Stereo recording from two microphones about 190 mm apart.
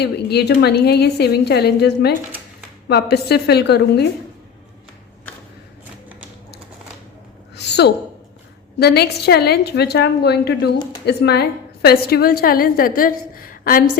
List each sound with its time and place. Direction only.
0.0 s a woman's voice: 60° left (ahead or behind)
7.5 s a sound: 60° left (ahead or behind)
8.8 s a woman's voice: 55° left (ahead or behind)